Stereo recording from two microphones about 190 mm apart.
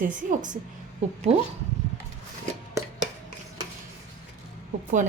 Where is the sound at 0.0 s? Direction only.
45° right (ahead or behind).